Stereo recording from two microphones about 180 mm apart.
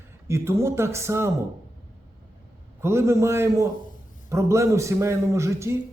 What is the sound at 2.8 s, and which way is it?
A man's voice, 15° right (ahead or behind).